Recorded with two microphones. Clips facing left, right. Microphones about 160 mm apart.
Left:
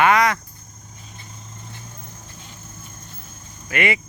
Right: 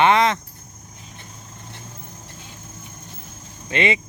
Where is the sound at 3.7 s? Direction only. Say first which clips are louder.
Right 1 dB; 20° right (ahead or behind).